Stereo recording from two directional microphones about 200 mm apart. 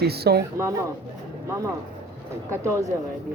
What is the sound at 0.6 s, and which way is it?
Speech, 15° right (ahead or behind).